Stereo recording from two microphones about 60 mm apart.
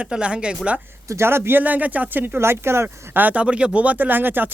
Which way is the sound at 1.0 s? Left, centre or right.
Right.